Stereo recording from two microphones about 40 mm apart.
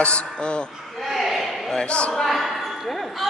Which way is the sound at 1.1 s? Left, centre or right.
Centre.